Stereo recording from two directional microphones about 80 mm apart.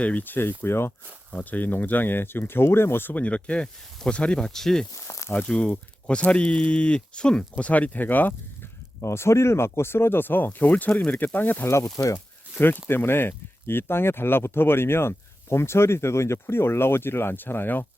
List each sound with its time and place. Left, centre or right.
0.0 s speech: centre
4.9 s speech: left
5.5 s speech: centre
9.0 s speech: left
12.0 s speech: left
12.5 s speech: left